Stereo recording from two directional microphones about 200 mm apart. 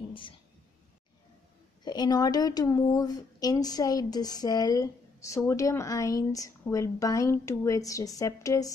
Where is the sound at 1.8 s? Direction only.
20° left (ahead or behind).